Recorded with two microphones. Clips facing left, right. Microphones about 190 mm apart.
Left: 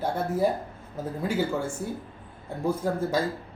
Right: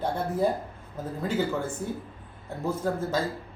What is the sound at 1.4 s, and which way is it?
Speech, 10° left (ahead or behind).